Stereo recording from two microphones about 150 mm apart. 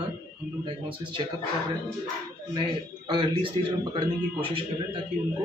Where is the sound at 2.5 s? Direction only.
30° right (ahead or behind).